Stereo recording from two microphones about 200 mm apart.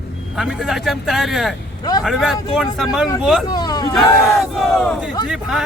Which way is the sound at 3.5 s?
20° left (ahead or behind).